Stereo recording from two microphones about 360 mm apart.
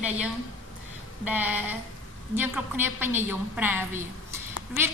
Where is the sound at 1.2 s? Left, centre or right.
Centre.